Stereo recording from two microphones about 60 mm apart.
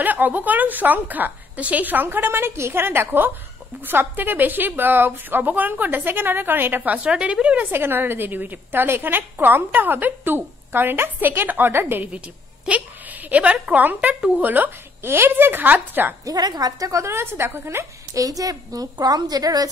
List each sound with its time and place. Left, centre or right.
0.0 s a woman's voice: right
7.1 s a woman's voice: centre
7.7 s a woman's voice: right
12.6 s a woman's voice: right
16.3 s a woman's voice: right
17.0 s a woman's voice: right
18.1 s a woman's voice: right